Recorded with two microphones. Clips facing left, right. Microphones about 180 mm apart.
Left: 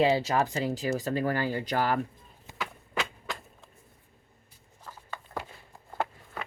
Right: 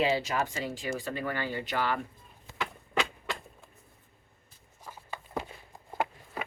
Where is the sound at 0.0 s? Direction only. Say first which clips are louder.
Left 4 dB; 35° left (ahead or behind).